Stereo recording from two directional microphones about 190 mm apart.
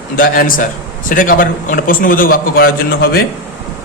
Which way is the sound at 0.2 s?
45° left (ahead or behind).